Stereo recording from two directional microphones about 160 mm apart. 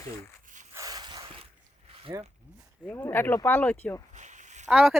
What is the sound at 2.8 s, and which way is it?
Speech, 15° left (ahead or behind).